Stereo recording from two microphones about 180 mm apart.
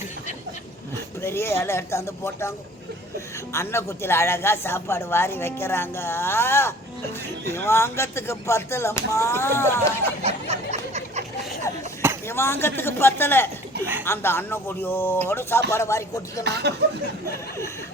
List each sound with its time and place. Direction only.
1.2 s speech: 15° left (ahead or behind)
3.5 s speech: 15° left (ahead or behind)
10.2 s a sound: 35° right (ahead or behind)
12.3 s speech: 15° left (ahead or behind)
16.4 s speech: 70° right (ahead or behind)